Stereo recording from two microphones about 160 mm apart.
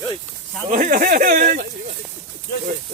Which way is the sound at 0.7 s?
55° right (ahead or behind).